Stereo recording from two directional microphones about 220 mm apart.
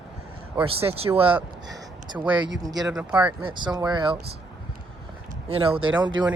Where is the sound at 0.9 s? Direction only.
25° right (ahead or behind).